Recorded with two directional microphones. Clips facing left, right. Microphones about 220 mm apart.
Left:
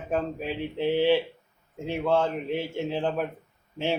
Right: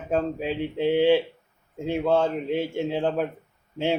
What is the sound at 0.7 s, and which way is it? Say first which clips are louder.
Speech: right 3 dB; 15° right (ahead or behind).